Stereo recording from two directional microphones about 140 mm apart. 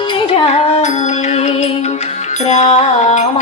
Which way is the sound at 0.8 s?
55° left (ahead or behind).